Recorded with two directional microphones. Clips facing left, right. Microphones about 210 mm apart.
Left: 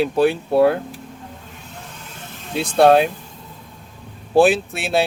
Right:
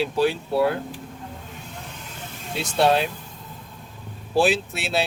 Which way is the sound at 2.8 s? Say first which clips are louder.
Left 7 dB; 55° left (ahead or behind).